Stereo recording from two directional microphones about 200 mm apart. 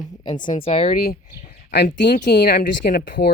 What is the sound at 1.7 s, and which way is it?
Speech, 45° left (ahead or behind).